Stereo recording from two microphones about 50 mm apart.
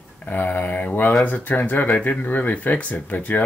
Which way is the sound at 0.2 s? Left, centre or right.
Left.